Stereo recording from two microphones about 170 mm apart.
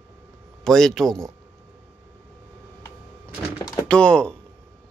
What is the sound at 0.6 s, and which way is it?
Speech, centre (ahead or behind).